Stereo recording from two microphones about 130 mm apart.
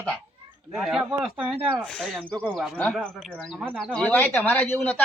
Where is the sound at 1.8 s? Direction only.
5° left (ahead or behind).